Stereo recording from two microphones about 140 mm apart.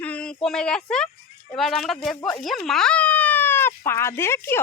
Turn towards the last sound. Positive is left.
turn(degrees=15)  # may be behind; listen again after turning